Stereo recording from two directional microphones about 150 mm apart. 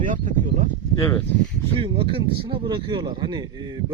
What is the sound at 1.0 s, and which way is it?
Speech, 20° left (ahead or behind).